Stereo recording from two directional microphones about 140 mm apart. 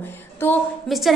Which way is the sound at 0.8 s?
Centre (ahead or behind).